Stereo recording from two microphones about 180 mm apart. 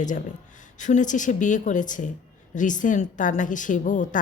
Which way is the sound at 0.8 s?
45° left (ahead or behind).